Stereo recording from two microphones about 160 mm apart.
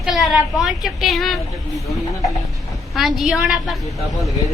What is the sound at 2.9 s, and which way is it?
Speech, centre (ahead or behind).